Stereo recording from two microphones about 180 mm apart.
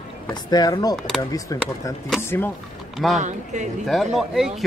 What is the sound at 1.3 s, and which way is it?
Speech, 20° left (ahead or behind).